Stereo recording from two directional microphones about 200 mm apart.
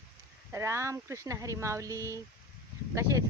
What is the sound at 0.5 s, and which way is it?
Speech, 15° right (ahead or behind).